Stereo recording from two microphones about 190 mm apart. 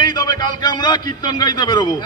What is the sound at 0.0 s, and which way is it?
A man's voice, 20° left (ahead or behind).